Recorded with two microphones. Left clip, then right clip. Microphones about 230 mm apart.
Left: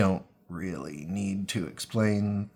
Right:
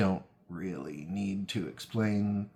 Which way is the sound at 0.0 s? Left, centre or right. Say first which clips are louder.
Left 4 dB; left.